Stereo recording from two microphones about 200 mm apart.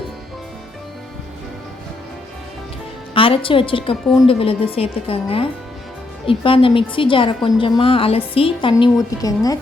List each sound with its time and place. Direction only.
3.2 s a woman's voice: 25° left (ahead or behind)